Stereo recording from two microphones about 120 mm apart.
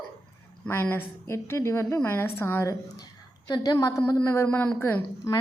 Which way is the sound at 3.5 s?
35° left (ahead or behind).